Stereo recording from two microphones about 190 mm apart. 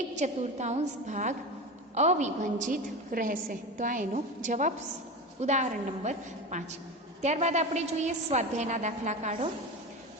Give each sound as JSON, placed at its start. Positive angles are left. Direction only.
{"t": 0.2, "sound": "a woman's voice", "side_deg": -40}